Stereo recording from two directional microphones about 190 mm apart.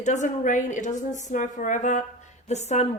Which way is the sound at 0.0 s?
40° left (ahead or behind).